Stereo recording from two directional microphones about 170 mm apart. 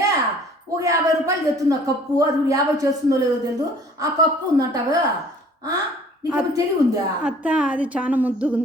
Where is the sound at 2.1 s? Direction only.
20° right (ahead or behind).